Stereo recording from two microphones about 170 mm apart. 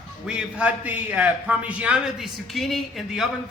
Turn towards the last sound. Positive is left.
turn(degrees=0)  # may be behind; listen again after turning